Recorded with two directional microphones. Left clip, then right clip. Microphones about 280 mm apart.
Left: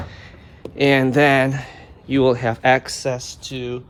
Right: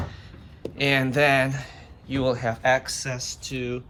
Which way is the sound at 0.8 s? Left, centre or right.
Left.